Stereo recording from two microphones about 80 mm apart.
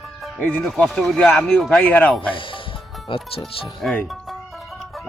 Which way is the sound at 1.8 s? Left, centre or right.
Left.